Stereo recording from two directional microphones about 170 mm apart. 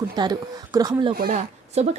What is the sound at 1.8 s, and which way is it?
Speech, 40° right (ahead or behind).